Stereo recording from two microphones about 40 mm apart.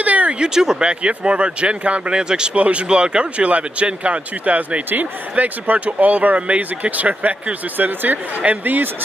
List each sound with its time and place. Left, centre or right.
0.0 s a sound: right
0.4 s speech: centre
2.5 s speech: right
7.7 s speech: right
8.4 s speech: right